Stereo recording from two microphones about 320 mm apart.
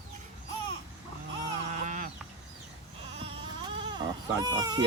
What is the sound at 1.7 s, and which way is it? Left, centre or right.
Sheep, right.